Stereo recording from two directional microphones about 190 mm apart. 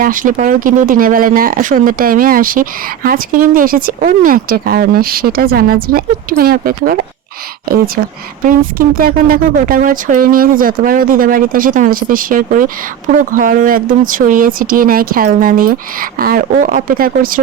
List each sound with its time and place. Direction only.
0.0 s speech: 45° right (ahead or behind)
8.4 s speech: 50° right (ahead or behind)